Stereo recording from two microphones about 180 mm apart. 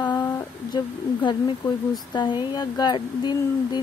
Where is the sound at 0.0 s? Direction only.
20° left (ahead or behind).